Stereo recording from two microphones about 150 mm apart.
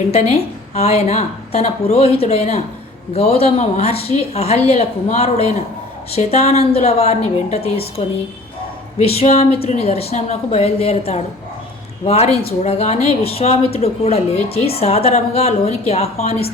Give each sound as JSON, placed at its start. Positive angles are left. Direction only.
{"t": 0.1, "sound": "a woman's voice", "side_deg": 45}